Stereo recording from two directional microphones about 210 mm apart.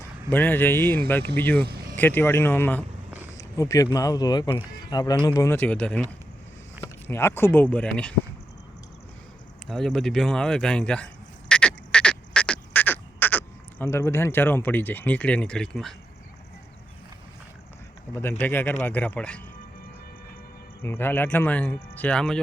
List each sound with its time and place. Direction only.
0.3 s speech: 10° left (ahead or behind)
1.6 s vehicle: 50° right (ahead or behind)
2.0 s speech: 10° left (ahead or behind)
9.6 s a sound: centre (ahead or behind)
18.1 s speech: 10° left (ahead or behind)
20.8 s speech: 10° left (ahead or behind)